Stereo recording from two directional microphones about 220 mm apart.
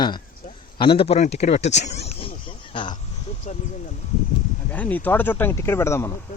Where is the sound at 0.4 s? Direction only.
25° left (ahead or behind).